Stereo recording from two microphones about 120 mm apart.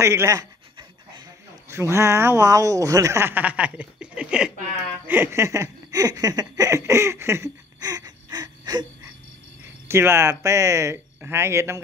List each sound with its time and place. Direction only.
0.0 s speech: 25° right (ahead or behind)
1.7 s speech: 25° right (ahead or behind); by 4.5 s 10° right (ahead or behind)
5.0 s laughter: 20° right (ahead or behind); by 8.8 s 35° right (ahead or behind)
9.8 s speech: 20° right (ahead or behind)